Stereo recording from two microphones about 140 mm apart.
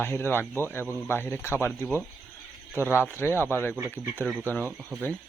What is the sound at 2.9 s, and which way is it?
Speech, 15° right (ahead or behind).